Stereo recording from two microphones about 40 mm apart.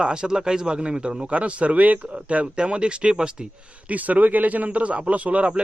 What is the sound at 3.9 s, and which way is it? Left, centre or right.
Speech, right.